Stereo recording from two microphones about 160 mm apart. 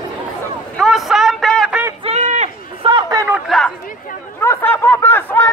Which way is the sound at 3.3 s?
Centre (ahead or behind).